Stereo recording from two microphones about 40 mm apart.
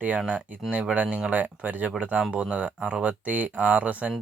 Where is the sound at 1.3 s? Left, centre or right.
Right.